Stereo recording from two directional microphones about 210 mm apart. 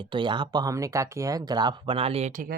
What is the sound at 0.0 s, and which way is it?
Speech, 20° right (ahead or behind).